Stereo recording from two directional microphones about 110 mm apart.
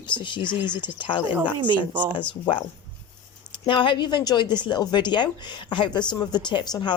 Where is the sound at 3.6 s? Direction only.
50° left (ahead or behind).